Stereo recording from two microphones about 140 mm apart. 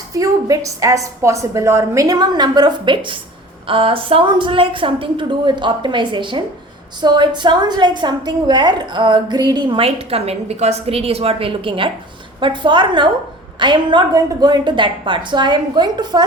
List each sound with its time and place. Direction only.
0.1 s a woman's voice: 25° right (ahead or behind)